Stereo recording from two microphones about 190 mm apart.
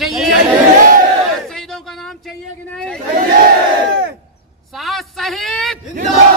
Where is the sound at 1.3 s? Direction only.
5° left (ahead or behind).